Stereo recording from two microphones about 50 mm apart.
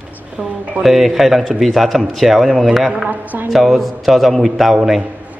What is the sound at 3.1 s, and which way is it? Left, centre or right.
Speech, right.